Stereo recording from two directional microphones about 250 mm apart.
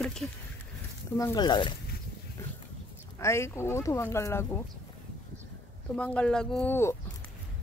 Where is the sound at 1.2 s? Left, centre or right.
Centre.